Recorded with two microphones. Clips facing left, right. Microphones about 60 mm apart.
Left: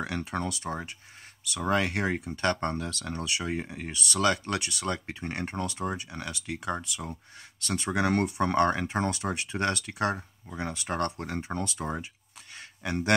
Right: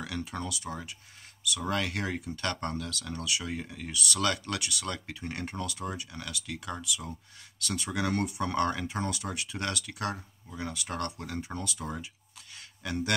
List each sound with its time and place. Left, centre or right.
0.0 s speech: left